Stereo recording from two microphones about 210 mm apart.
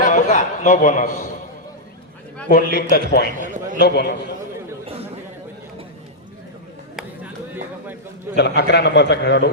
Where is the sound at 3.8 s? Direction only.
50° left (ahead or behind).